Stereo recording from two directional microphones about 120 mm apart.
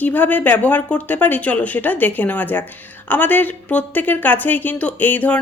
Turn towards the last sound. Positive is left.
turn(degrees=15)  # may be behind; listen again after turning